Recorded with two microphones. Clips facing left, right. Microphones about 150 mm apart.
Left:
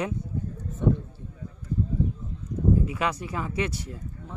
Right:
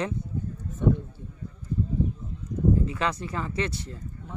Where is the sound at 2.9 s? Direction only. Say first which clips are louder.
Even; 10° left (ahead or behind).